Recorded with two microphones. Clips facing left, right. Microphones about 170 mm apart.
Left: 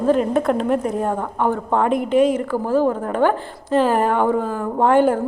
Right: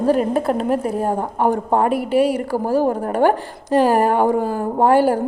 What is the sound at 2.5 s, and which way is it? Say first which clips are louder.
A woman's voice: even; 40° right (ahead or behind).